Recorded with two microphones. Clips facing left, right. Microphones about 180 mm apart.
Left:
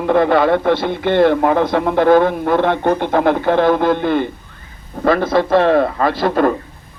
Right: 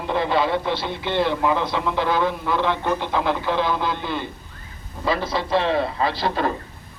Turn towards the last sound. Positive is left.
turn(degrees=50)  # may be behind; listen again after turning